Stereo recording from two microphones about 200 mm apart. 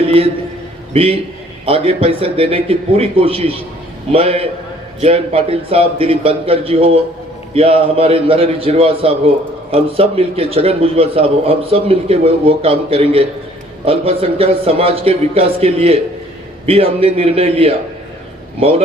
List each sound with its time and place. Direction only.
0.9 s a man's voice: 30° right (ahead or behind)